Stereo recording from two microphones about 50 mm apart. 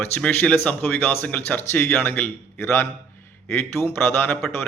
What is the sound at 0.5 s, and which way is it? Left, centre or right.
Speech, left.